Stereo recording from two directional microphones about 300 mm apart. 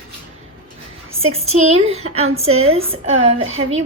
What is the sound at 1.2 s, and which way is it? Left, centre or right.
A woman's voice, centre.